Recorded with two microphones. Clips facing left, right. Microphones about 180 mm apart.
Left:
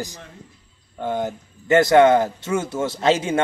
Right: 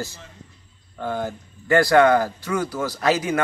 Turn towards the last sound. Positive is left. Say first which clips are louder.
# left 2 dB
turn(degrees=25)  # may be behind; listen again after turning